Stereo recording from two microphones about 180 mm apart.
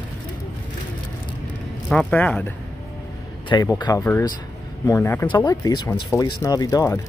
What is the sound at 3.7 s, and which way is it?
Speech, 25° left (ahead or behind).